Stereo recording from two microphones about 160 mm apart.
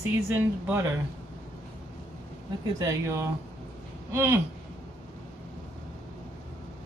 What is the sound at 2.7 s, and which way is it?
Speech, 20° right (ahead or behind).